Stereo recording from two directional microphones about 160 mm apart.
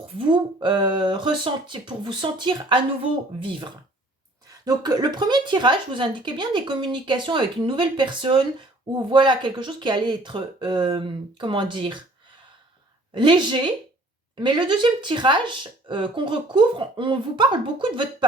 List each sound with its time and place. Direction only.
0.2 s speech: 30° right (ahead or behind)
13.1 s speech: 30° right (ahead or behind)